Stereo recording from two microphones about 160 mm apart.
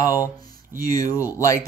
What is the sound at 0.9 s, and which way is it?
Speech, 20° left (ahead or behind).